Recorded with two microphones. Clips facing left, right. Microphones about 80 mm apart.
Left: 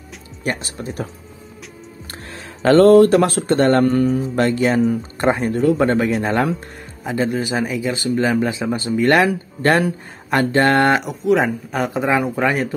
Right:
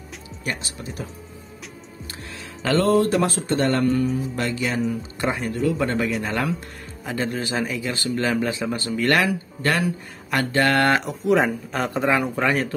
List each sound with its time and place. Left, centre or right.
0.4 s speech: left
2.0 s speech: left
7.1 s speech: centre
9.3 s speech: left
11.1 s speech: centre